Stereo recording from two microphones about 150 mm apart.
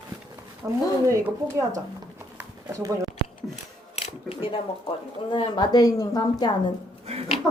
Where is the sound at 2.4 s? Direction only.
20° right (ahead or behind).